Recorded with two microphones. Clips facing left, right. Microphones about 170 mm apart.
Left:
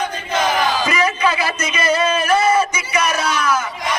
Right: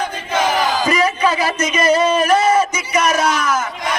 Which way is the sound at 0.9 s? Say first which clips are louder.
Right 2 dB; 40° right (ahead or behind).